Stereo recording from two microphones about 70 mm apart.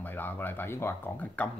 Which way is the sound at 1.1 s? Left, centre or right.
Left.